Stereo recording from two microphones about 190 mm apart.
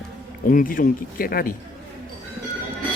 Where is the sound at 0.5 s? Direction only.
45° left (ahead or behind).